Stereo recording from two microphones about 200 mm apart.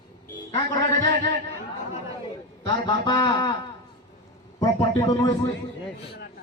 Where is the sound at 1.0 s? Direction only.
45° right (ahead or behind).